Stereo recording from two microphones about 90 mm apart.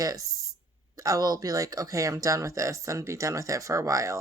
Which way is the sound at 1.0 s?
45° right (ahead or behind).